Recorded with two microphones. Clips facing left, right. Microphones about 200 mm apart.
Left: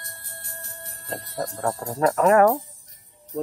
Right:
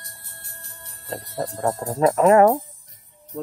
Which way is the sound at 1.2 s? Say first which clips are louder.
Right 2 dB; 25° right (ahead or behind).